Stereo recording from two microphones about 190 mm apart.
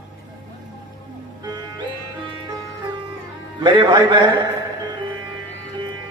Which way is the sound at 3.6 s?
25° right (ahead or behind).